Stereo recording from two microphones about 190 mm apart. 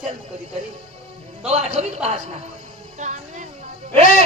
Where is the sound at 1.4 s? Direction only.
35° right (ahead or behind).